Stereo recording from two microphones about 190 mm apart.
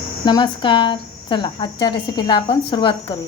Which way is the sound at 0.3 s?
25° left (ahead or behind).